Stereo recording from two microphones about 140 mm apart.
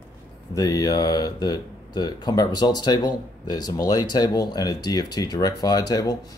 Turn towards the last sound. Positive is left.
turn(degrees=25)  # may be behind; listen again after turning